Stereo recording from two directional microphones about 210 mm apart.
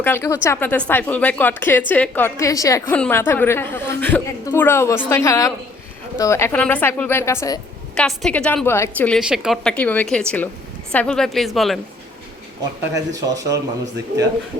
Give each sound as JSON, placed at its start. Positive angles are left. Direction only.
{"t": 0.0, "sound": "speech", "side_deg": 10}
{"t": 7.9, "sound": "a woman's voice", "side_deg": 5}
{"t": 12.9, "sound": "speech", "side_deg": -15}